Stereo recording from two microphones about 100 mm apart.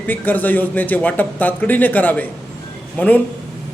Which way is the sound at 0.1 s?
20° left (ahead or behind).